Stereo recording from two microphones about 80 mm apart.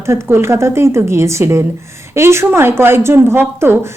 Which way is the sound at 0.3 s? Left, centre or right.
Right.